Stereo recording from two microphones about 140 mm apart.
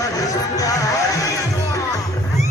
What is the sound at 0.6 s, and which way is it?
Music, 25° left (ahead or behind).